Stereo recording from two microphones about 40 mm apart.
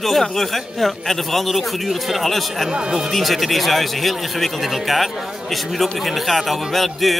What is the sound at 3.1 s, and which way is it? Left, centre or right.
Speech, centre.